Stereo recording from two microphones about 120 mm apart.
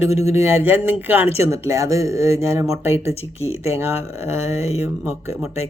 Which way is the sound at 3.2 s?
60° left (ahead or behind).